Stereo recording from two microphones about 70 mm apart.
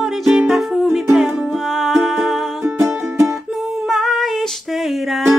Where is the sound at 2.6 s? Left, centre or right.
Right.